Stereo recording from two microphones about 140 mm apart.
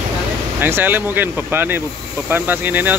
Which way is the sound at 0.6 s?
15° right (ahead or behind).